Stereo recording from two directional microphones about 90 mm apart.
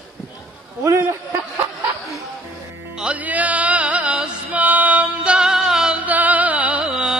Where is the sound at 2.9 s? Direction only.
15° right (ahead or behind).